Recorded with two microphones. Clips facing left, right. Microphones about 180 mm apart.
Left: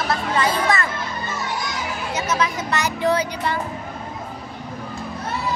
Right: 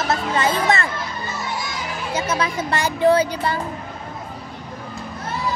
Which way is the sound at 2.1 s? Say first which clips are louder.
Right 1 dB; 30° right (ahead or behind).